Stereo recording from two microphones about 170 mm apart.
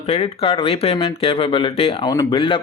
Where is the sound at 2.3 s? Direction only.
30° left (ahead or behind).